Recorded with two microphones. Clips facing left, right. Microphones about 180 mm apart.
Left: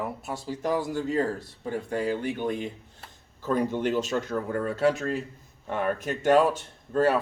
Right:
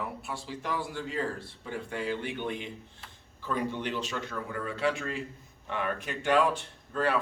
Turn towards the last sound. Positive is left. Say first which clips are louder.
# left 6 dB
turn(degrees=40)  # may be behind; listen again after turning